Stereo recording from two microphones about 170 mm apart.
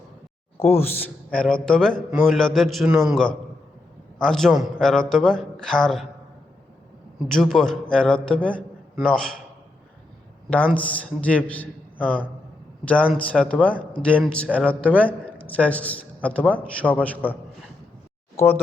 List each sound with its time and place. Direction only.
0.6 s a man's voice: 15° left (ahead or behind)
7.3 s a man's voice: centre (ahead or behind)
10.5 s a man's voice: 10° left (ahead or behind)
13.3 s a man's voice: 5° left (ahead or behind)